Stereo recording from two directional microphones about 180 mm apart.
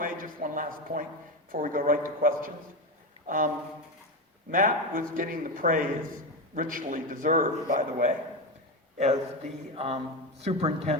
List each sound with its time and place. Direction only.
0.0 s a man's voice: 50° right (ahead or behind)
4.5 s a man's voice: 50° right (ahead or behind)
9.7 s speech: 35° right (ahead or behind)